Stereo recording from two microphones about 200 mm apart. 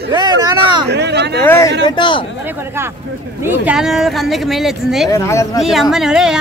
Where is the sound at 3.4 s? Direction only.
10° right (ahead or behind).